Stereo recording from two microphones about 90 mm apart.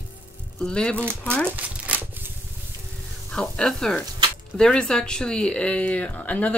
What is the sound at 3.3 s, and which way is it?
A woman's voice, 10° left (ahead or behind).